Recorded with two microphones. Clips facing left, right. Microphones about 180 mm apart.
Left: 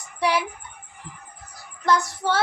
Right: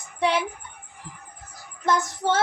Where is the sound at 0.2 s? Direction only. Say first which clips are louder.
Even; 25° right (ahead or behind).